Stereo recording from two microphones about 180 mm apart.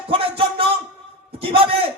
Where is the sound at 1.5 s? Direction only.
30° right (ahead or behind).